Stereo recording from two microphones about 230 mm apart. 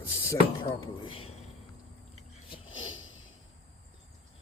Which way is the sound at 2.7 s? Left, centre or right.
Left.